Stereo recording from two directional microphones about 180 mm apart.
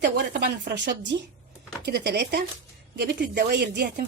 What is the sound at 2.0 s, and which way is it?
A woman's voice, 65° right (ahead or behind).